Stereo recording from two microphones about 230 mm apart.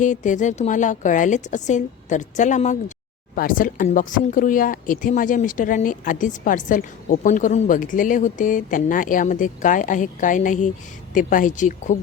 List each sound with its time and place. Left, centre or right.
0.0 s speech: left